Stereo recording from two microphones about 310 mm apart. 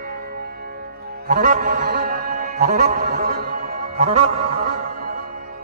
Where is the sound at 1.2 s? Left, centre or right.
Right.